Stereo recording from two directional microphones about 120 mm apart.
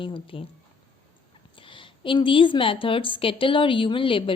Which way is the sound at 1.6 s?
45° left (ahead or behind).